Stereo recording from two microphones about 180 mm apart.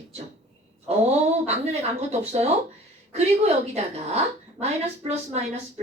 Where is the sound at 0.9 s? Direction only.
35° right (ahead or behind).